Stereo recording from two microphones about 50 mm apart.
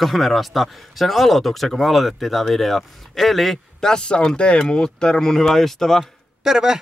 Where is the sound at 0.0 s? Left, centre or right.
Centre.